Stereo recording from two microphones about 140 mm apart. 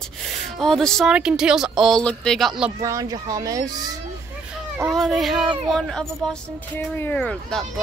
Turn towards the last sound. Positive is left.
turn(degrees=5)  # may be behind; listen again after turning